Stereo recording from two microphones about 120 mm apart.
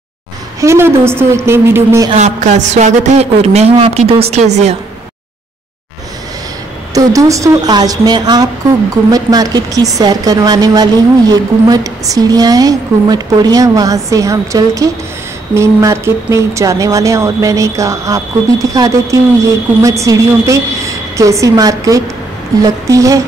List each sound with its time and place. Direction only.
0.6 s speech: 25° right (ahead or behind)
2.1 s a woman's voice: 75° right (ahead or behind)
6.9 s a woman's voice: 30° right (ahead or behind)